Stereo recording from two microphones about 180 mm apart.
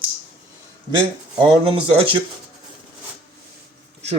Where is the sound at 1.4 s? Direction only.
30° right (ahead or behind).